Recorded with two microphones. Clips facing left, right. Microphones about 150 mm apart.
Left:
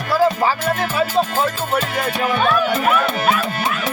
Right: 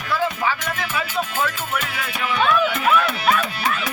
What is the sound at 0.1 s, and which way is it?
Music, 35° left (ahead or behind).